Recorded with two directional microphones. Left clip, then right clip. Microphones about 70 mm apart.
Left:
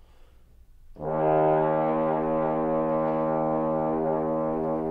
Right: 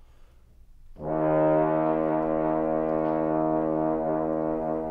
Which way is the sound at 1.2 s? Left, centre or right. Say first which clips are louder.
Left 1 dB; centre.